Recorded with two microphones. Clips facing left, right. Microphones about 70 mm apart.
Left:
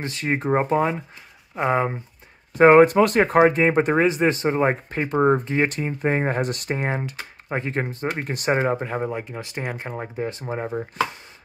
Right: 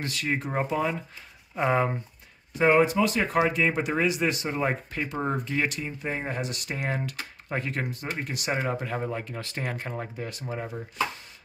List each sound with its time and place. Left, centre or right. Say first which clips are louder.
0.0 s speech: left 5 dB; left
1.5 s speech: left 3 dB; centre
2.5 s speech: left 8 dB; left